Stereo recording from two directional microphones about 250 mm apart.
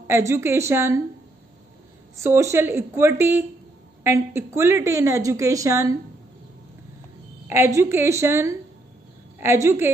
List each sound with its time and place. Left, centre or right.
0.0 s a woman's voice: centre
2.1 s a woman's voice: centre
7.4 s a woman's voice: centre